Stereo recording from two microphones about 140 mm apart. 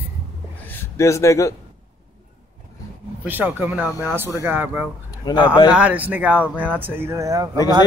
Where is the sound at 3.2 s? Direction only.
15° right (ahead or behind).